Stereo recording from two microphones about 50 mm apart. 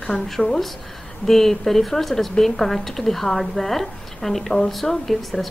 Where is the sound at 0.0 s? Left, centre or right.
Centre.